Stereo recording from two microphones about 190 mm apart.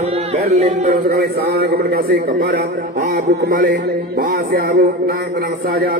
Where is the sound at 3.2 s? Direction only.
45° right (ahead or behind).